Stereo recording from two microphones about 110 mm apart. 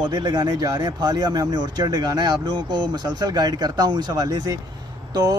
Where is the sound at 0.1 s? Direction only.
35° right (ahead or behind).